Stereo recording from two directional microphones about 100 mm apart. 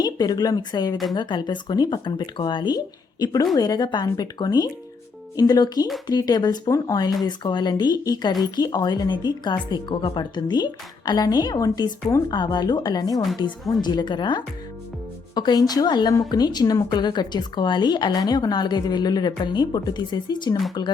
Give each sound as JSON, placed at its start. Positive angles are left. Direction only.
{"t": 0.0, "sound": "a woman's voice", "side_deg": 45}
{"t": 12.3, "sound": "a woman's voice", "side_deg": 45}